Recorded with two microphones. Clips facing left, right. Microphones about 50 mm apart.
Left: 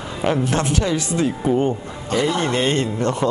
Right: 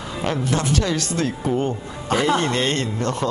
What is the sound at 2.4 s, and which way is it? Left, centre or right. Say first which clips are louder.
Speech: left 2 dB; centre.